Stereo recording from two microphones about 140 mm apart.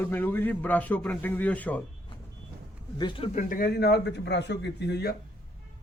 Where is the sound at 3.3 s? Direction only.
75° left (ahead or behind).